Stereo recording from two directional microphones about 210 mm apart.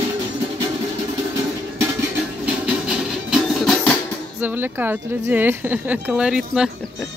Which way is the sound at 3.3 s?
Centre (ahead or behind).